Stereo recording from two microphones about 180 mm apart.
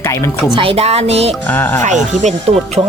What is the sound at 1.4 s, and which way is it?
Speech, 10° left (ahead or behind).